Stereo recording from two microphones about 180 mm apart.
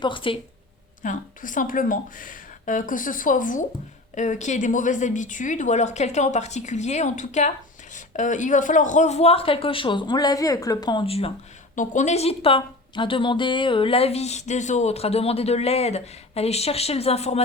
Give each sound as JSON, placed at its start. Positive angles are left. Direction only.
{"t": 0.0, "sound": "speech", "side_deg": 30}
{"t": 1.0, "sound": "a woman's voice", "side_deg": 45}
{"t": 11.7, "sound": "a woman's voice", "side_deg": 45}